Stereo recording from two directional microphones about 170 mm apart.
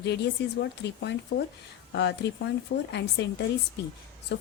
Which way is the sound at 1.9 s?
90° left.